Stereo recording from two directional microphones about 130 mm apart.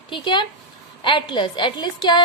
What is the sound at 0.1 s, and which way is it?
A woman's voice, 35° left (ahead or behind).